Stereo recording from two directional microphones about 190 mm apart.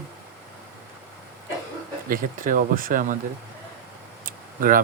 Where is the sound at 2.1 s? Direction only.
45° right (ahead or behind).